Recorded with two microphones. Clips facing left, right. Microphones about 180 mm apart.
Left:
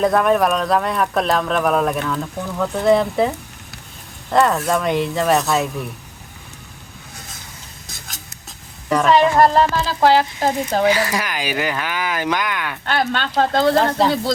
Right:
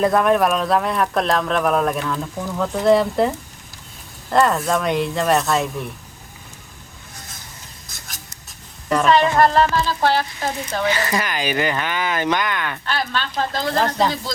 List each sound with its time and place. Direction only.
0.0 s speech: centre (ahead or behind)
8.9 s speech: 15° left (ahead or behind)
9.9 s speech: 40° left (ahead or behind)
10.8 s speech: 10° left (ahead or behind)
12.8 s speech: 50° left (ahead or behind)